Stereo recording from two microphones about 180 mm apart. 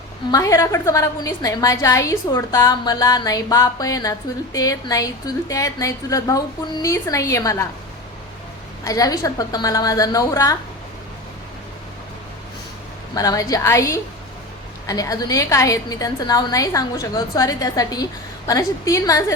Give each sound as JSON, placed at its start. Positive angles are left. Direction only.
{"t": 0.3, "sound": "a woman's voice", "side_deg": 20}
{"t": 8.8, "sound": "a woman's voice", "side_deg": 20}
{"t": 13.1, "sound": "a woman's voice", "side_deg": 20}